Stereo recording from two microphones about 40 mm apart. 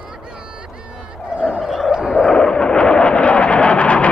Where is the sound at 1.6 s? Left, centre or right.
Centre.